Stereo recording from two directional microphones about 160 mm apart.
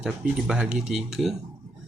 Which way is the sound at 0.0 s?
5° right (ahead or behind).